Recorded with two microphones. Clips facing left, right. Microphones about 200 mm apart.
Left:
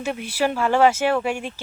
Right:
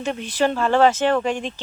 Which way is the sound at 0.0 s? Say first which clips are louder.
Right 2 dB; 10° left (ahead or behind).